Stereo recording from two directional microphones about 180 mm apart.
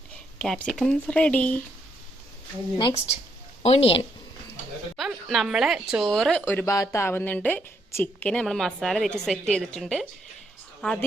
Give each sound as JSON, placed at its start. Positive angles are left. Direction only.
{"t": 0.3, "sound": "a woman's voice", "side_deg": 5}
{"t": 2.7, "sound": "speech", "side_deg": 30}
{"t": 4.9, "sound": "a woman's voice", "side_deg": 0}